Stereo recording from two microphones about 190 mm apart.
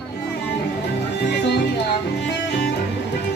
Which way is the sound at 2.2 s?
60° left (ahead or behind).